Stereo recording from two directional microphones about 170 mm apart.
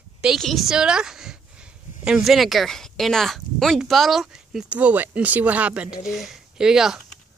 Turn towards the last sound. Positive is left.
turn(degrees=-5)  # may be behind; listen again after turning